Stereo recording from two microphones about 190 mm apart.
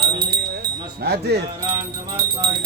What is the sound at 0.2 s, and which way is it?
Wind chime, 55° right (ahead or behind).